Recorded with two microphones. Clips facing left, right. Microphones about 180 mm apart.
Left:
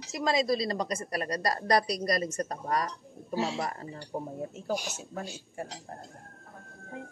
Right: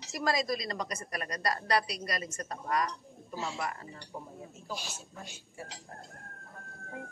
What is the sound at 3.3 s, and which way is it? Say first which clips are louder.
Speech: left 7 dB; 75° left (ahead or behind).